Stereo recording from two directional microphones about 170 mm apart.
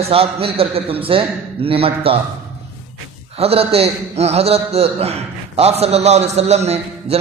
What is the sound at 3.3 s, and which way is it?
A man's voice, 35° right (ahead or behind).